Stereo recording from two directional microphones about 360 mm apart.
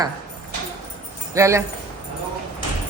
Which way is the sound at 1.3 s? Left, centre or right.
Centre.